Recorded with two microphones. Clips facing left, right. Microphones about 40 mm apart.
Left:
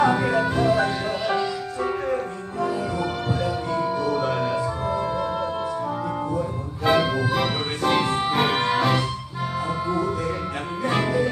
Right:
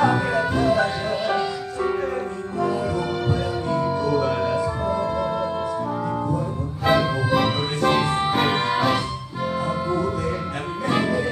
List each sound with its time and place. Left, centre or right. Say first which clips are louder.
0.0 s music: even; centre
3.3 s music: right 1 dB; centre
6.8 s music: even; centre
10.9 s music: even; centre